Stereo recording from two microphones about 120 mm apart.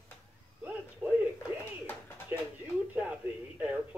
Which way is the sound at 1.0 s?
15° right (ahead or behind).